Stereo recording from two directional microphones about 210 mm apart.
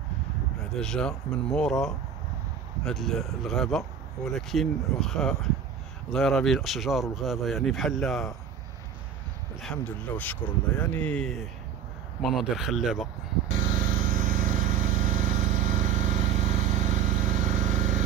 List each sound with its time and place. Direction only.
0.7 s speech: 5° left (ahead or behind)
9.6 s speech: 5° left (ahead or behind)
13.7 s a sound: 40° right (ahead or behind)